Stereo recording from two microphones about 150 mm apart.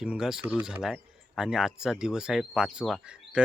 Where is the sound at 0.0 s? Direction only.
5° right (ahead or behind).